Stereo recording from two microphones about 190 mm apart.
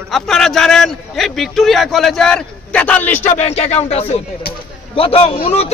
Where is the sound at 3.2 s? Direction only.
35° left (ahead or behind).